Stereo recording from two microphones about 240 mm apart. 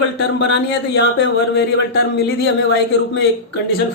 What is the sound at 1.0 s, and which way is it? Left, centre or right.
Speech, left.